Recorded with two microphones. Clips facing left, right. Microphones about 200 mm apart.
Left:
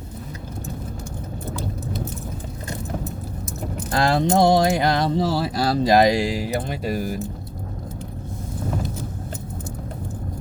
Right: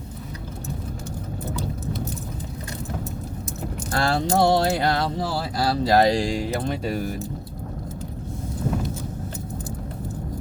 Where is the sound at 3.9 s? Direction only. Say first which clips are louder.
Left 3 dB; 20° left (ahead or behind).